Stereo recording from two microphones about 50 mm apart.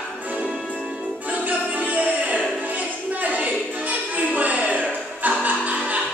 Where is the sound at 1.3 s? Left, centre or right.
Right.